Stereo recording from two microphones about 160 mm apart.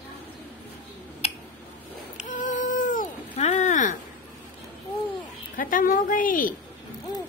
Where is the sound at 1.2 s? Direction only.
40° left (ahead or behind).